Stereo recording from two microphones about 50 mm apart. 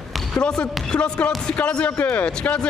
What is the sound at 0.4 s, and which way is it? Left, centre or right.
Speech, centre.